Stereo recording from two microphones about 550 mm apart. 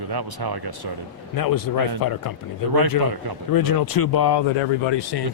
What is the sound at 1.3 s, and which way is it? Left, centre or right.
Speech, left.